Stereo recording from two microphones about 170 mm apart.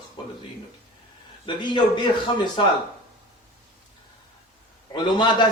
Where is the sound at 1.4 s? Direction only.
25° left (ahead or behind).